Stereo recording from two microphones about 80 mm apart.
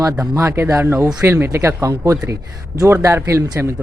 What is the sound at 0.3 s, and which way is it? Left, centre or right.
Speech, right.